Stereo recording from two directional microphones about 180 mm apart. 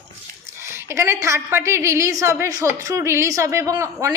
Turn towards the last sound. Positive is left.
turn(degrees=-20)  # may be behind; listen again after turning